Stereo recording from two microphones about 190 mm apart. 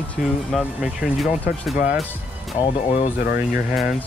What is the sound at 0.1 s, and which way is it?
Speech, centre (ahead or behind).